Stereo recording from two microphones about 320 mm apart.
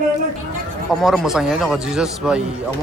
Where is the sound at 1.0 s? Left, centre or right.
Centre.